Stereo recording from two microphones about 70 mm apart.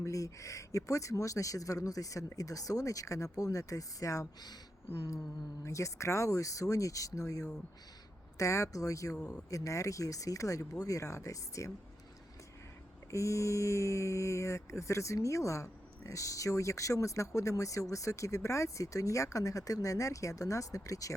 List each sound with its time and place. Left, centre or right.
0.0 s speech: left
5.6 s speech: left
9.1 s speech: centre
9.5 s speech: left
13.1 s speech: left